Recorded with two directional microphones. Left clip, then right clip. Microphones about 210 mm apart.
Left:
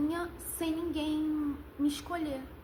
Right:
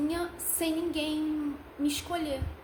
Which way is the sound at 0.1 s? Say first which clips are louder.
Right 3 dB; 15° right (ahead or behind).